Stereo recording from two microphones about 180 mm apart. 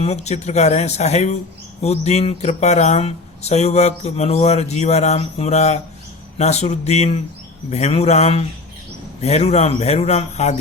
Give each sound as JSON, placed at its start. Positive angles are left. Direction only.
{"t": 0.0, "sound": "speech", "side_deg": 35}